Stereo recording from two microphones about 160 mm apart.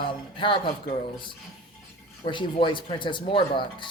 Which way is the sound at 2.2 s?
30° left (ahead or behind).